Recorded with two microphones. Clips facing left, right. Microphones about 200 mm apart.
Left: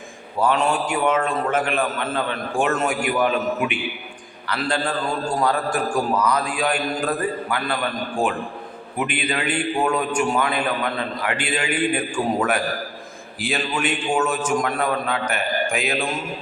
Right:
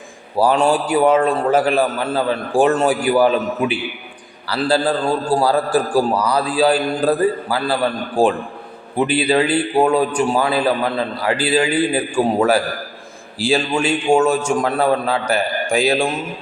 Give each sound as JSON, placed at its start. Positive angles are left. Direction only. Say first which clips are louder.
{"t": 0.3, "sound": "a man's voice", "louder": "right 5 dB", "side_deg": -35}
{"t": 14.1, "sound": "a man's voice", "louder": "right 8 dB", "side_deg": -45}
{"t": 14.6, "sound": "a man's voice", "louder": "right 6 dB", "side_deg": -30}